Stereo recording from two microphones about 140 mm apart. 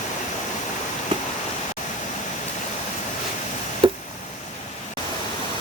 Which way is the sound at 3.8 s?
35° right (ahead or behind).